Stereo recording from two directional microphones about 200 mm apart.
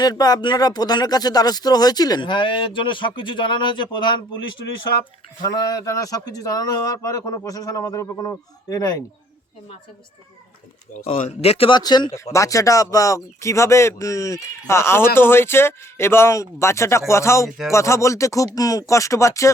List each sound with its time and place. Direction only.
0.0 s speech: 20° left (ahead or behind)
5.4 s speech: 15° left (ahead or behind)
11.0 s speech: 30° left (ahead or behind); by 19.5 s 15° left (ahead or behind)